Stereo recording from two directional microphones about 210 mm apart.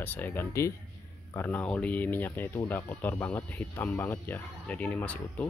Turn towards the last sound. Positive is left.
turn(degrees=5)  # may be behind; listen again after turning